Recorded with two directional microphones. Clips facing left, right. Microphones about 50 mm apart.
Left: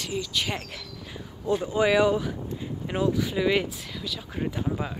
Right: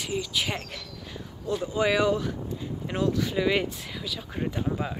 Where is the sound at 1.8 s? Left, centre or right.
Centre.